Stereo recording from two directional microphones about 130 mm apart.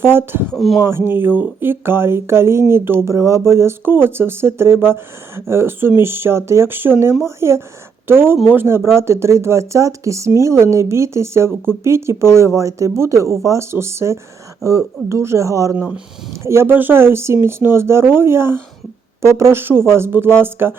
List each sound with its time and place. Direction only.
0.0 s speech: 15° right (ahead or behind)
0.5 s speech: centre (ahead or behind)
0.9 s speech: 20° right (ahead or behind)